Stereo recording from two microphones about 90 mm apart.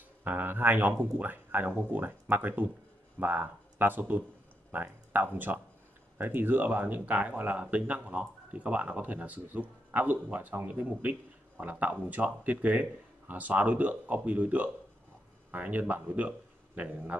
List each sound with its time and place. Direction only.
0.2 s speech: 20° right (ahead or behind)